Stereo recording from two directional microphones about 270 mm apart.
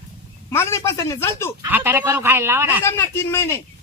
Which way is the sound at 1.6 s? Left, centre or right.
Centre.